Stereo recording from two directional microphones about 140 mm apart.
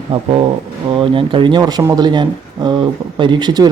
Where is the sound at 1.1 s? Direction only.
35° right (ahead or behind).